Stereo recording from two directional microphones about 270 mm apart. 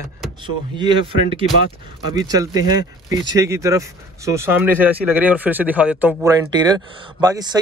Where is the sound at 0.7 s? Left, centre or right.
Centre.